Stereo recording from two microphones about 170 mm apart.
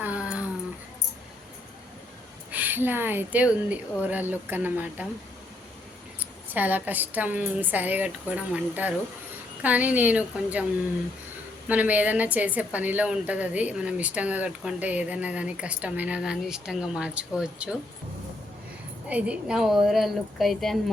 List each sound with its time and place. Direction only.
0.0 s a sound: 5° right (ahead or behind)
2.5 s a woman's voice: 10° right (ahead or behind)
6.1 s a woman's voice: 10° right (ahead or behind)
11.7 s a woman's voice: 10° right (ahead or behind)
19.0 s a woman's voice: 5° right (ahead or behind)